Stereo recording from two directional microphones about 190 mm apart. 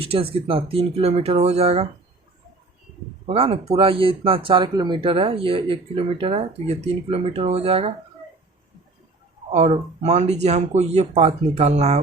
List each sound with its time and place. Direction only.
0.0 s speech: 30° right (ahead or behind)
3.2 s speech: 30° right (ahead or behind)
9.5 s speech: 35° right (ahead or behind)